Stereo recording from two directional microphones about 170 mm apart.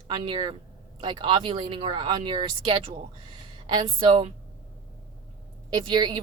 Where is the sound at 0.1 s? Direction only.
30° right (ahead or behind).